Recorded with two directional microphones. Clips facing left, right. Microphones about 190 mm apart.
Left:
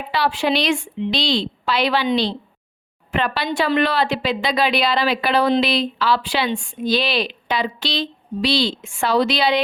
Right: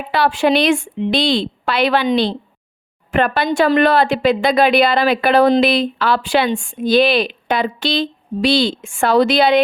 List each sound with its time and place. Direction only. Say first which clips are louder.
0.1 s speech: right 5 dB; 50° right (ahead or behind)